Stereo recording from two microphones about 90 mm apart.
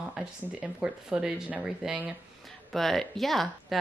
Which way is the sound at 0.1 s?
10° right (ahead or behind).